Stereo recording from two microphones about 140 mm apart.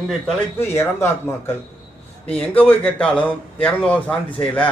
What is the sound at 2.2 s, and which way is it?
A man's voice, 10° left (ahead or behind).